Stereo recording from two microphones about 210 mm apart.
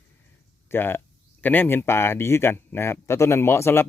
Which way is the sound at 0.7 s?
10° left (ahead or behind).